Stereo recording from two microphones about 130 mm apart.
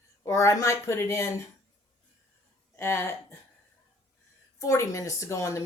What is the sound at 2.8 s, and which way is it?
Speech, 20° left (ahead or behind).